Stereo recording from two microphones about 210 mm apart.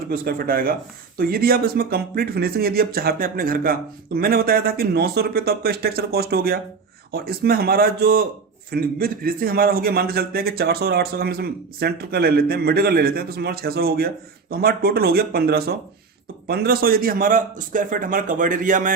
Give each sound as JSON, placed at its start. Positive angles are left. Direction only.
{"t": 0.1, "sound": "a man's voice", "side_deg": -45}